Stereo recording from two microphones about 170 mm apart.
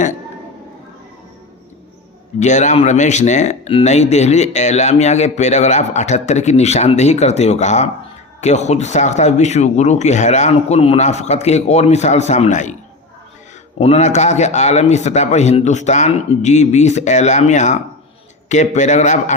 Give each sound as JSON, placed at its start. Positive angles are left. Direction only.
{"t": 2.4, "sound": "speech", "side_deg": 45}
{"t": 13.7, "sound": "speech", "side_deg": 35}